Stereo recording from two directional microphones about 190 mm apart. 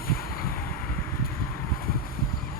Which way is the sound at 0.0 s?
50° left (ahead or behind).